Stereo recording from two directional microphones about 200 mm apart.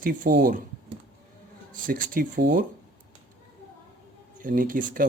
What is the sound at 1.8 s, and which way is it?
Speech, 45° right (ahead or behind).